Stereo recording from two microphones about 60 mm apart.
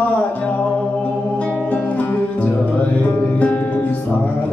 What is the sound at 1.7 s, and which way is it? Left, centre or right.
Music, left.